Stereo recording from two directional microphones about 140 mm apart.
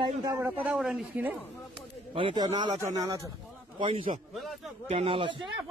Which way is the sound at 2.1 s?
35° right (ahead or behind).